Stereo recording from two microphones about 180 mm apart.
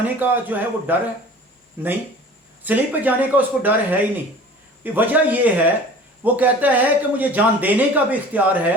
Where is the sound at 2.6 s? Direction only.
10° right (ahead or behind).